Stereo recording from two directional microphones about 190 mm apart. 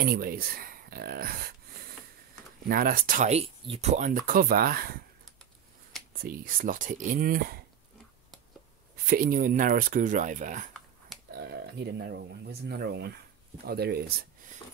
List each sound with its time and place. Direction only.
0.0 s speech: 50° right (ahead or behind)
2.6 s speech: 50° right (ahead or behind)
4.3 s speech: 50° right (ahead or behind)
6.2 s speech: 50° right (ahead or behind)
9.1 s speech: 50° right (ahead or behind)
11.3 s speech: 60° right (ahead or behind)